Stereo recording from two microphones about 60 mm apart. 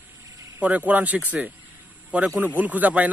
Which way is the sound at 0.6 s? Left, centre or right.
Right.